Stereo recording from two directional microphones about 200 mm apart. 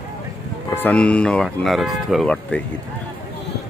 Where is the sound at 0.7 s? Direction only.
10° left (ahead or behind).